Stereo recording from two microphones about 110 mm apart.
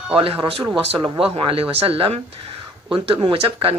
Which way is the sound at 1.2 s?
55° right (ahead or behind).